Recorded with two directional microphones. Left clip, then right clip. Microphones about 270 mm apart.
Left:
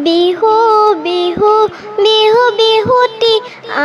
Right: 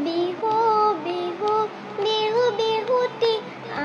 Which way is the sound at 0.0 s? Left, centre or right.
Left.